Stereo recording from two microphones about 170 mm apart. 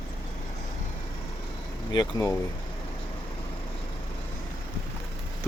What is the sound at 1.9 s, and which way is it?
Speech, 20° left (ahead or behind).